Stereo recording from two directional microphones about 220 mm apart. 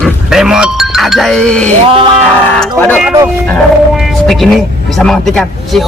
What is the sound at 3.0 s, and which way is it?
Speech, 10° right (ahead or behind).